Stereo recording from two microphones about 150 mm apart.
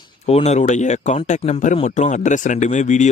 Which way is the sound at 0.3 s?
45° left (ahead or behind).